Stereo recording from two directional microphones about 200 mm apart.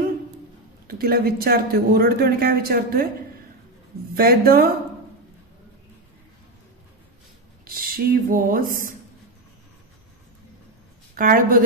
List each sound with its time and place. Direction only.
0.8 s a man's voice: 50° right (ahead or behind)
4.1 s a man's voice: 50° right (ahead or behind)
7.6 s a man's voice: 45° right (ahead or behind)
11.1 s a man's voice: 45° right (ahead or behind)